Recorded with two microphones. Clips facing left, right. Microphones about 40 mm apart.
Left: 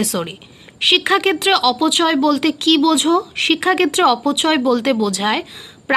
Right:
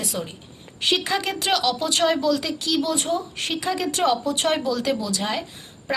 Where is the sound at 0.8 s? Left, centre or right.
Left.